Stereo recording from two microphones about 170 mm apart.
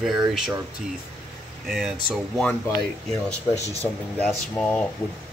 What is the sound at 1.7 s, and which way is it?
Speech, centre (ahead or behind).